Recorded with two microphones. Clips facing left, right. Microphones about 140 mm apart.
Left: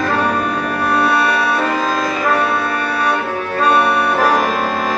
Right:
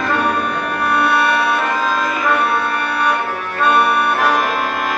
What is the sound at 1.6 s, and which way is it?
Music, 35° left (ahead or behind).